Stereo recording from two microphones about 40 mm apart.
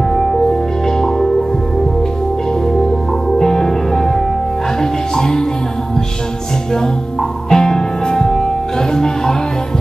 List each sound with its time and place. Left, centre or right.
0.1 s music: centre
3.3 s music: centre
7.4 s music: centre